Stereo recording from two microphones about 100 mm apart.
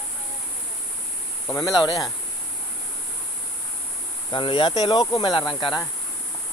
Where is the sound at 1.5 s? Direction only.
35° left (ahead or behind).